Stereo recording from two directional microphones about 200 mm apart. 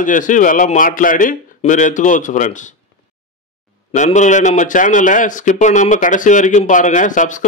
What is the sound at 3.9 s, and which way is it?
A man's voice, 35° left (ahead or behind).